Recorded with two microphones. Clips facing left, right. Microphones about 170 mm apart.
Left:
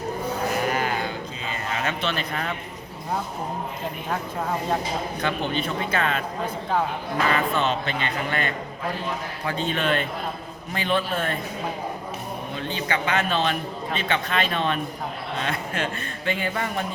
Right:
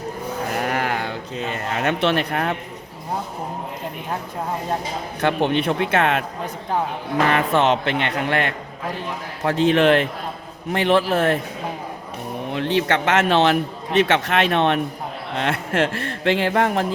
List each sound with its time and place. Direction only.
0.6 s a sound: 70° right (ahead or behind)
1.8 s a man's voice: 70° right (ahead or behind)
5.2 s a man's voice: 70° right (ahead or behind)
6.4 s a man's voice: 15° right (ahead or behind)
7.3 s a man's voice: 75° right (ahead or behind)
12.5 s a man's voice: 80° right